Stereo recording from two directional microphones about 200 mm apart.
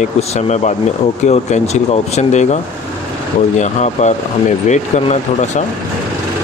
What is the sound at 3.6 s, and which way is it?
Speech, 35° left (ahead or behind).